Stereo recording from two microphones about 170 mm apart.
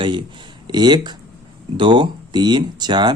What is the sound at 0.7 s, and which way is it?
Speech, 25° right (ahead or behind).